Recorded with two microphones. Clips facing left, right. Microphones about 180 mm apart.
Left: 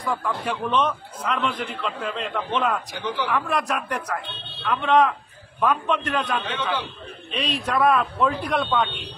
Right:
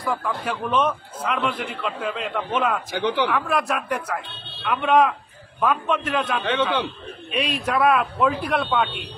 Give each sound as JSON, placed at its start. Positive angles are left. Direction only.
{"t": 0.0, "sound": "a man's voice", "side_deg": 0}
{"t": 3.0, "sound": "speech", "side_deg": -70}
{"t": 3.3, "sound": "a man's voice", "side_deg": 0}